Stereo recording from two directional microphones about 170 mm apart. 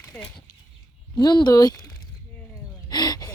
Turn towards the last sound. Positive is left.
turn(degrees=25)  # may be behind; listen again after turning